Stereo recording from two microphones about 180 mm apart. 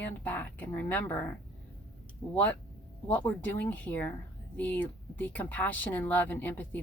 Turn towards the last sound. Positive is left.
turn(degrees=10)  # may be behind; listen again after turning